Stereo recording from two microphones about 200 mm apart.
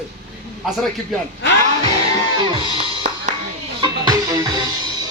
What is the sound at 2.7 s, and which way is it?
Music, 25° right (ahead or behind).